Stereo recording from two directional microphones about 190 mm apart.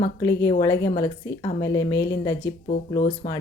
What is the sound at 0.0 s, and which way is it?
Speech, 20° left (ahead or behind).